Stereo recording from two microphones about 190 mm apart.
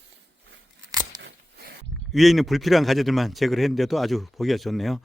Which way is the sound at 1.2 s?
55° right (ahead or behind).